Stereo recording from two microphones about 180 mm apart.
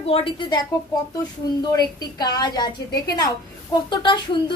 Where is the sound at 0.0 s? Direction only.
30° left (ahead or behind).